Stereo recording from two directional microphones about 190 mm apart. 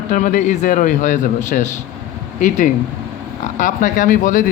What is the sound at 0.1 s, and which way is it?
Speech, 45° left (ahead or behind).